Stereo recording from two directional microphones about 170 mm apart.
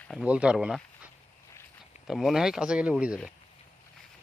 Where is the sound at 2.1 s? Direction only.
Centre (ahead or behind).